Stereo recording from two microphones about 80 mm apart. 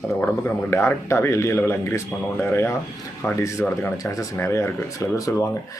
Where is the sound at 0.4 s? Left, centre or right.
Left.